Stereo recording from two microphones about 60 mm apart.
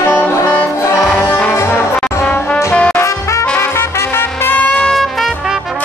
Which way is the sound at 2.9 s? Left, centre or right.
Left.